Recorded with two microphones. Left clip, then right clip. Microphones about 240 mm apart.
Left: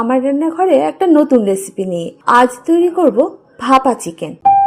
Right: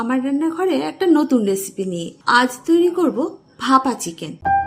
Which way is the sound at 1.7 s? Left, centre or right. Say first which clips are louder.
Left 6 dB; centre.